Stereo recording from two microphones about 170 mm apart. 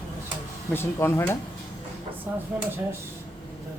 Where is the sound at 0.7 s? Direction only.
15° left (ahead or behind).